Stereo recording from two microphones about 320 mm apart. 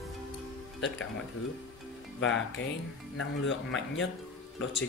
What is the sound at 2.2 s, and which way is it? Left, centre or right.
A man's voice, left.